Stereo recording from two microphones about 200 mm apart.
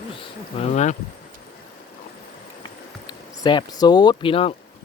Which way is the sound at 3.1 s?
20° left (ahead or behind).